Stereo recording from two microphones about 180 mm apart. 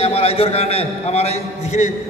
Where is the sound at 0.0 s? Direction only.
35° left (ahead or behind).